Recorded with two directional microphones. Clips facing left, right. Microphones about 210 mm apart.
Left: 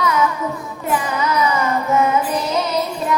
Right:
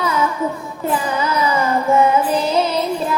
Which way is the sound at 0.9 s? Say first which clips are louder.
Right 1 dB; 30° right (ahead or behind).